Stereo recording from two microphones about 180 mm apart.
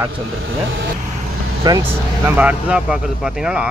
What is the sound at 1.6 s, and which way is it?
Speech, 15° right (ahead or behind).